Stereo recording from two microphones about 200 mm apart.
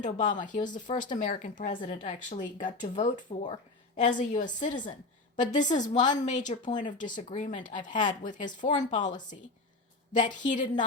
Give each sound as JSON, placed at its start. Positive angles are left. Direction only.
{"t": 0.0, "sound": "a woman's voice", "side_deg": 40}
{"t": 0.9, "sound": "a woman's voice", "side_deg": 30}
{"t": 3.2, "sound": "speech", "side_deg": 25}
{"t": 4.0, "sound": "a woman's voice", "side_deg": 35}